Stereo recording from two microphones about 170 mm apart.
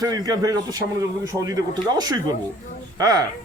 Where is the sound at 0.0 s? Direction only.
20° right (ahead or behind).